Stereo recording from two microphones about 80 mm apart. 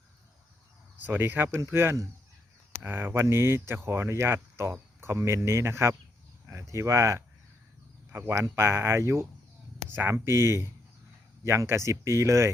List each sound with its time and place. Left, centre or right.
1.0 s speech: right
8.1 s speech: right